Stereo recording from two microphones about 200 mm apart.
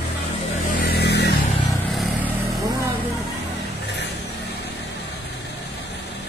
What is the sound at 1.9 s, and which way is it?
Vehicle, 5° right (ahead or behind).